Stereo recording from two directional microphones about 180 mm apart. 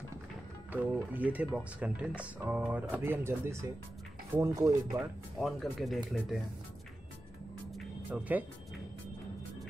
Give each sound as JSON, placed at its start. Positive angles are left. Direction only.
{"t": 0.7, "sound": "speech", "side_deg": -10}
{"t": 5.4, "sound": "speech", "side_deg": 0}
{"t": 8.1, "sound": "speech", "side_deg": -10}